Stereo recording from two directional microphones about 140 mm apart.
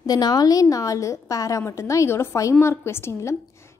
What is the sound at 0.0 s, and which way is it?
A woman's voice, 30° left (ahead or behind).